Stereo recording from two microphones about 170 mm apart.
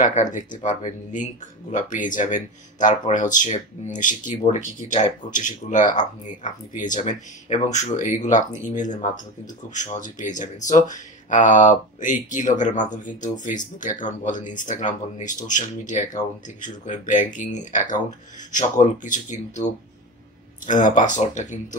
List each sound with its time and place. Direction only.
0.0 s speech: 50° left (ahead or behind)